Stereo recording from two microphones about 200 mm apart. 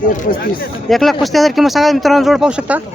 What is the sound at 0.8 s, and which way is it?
Speech, centre (ahead or behind).